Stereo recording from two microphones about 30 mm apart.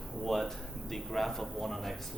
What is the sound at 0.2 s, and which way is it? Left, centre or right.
Speech, centre.